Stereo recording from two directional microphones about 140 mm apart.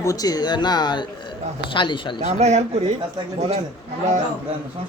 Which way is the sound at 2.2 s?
55° right (ahead or behind).